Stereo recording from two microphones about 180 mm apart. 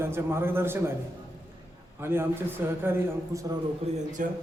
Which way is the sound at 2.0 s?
15° right (ahead or behind).